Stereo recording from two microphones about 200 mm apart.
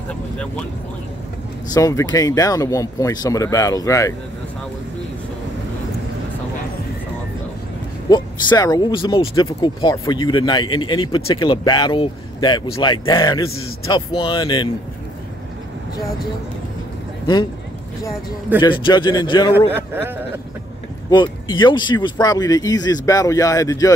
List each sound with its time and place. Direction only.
1.7 s speech: 15° left (ahead or behind)
8.1 s speech: 20° left (ahead or behind)
18.6 s speech: 25° left (ahead or behind)
19.7 s speech: 10° right (ahead or behind)
21.1 s speech: 25° left (ahead or behind)